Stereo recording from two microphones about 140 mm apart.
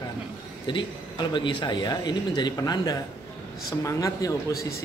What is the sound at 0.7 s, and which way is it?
A man's voice, 35° left (ahead or behind).